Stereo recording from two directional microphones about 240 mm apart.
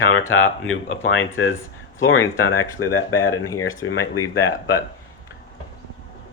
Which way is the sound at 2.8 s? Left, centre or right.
Left.